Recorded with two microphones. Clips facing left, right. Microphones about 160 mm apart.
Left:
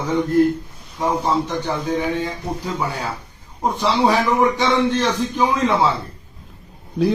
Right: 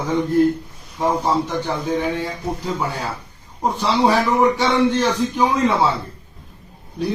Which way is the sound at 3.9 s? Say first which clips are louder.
Right 1 dB; 10° right (ahead or behind).